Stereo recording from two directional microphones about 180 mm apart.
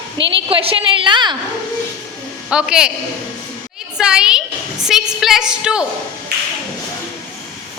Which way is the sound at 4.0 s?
5° right (ahead or behind).